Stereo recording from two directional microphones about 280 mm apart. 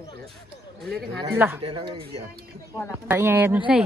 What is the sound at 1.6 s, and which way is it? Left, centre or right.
Speech, centre.